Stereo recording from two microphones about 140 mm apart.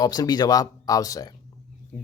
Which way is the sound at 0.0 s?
25° left (ahead or behind).